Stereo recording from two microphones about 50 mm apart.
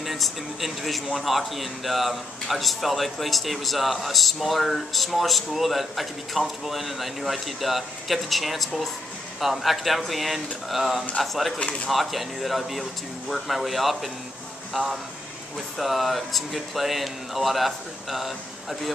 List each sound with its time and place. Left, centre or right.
0.0 s speech: centre
11.5 s speech: left
11.9 s speech: centre